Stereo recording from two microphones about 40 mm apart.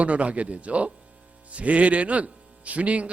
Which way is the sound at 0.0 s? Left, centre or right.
Right.